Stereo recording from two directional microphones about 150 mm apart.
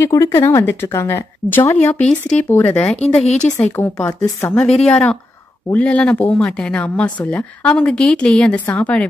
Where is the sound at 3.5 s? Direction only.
15° left (ahead or behind).